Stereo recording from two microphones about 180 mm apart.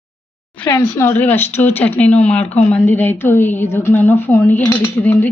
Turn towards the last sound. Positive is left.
turn(degrees=10)  # may be behind; listen again after turning